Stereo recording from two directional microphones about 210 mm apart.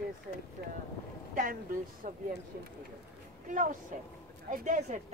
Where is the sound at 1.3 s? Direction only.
40° right (ahead or behind).